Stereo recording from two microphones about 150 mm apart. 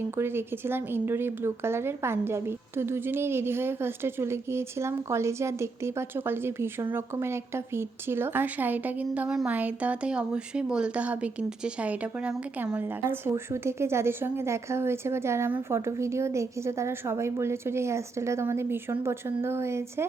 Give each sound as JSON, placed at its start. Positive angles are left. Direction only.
{"t": 0.2, "sound": "a woman's voice", "side_deg": -15}